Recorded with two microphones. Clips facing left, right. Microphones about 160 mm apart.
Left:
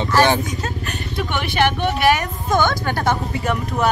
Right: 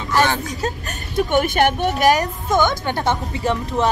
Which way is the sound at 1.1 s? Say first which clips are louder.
Right 6 dB; 45° right (ahead or behind).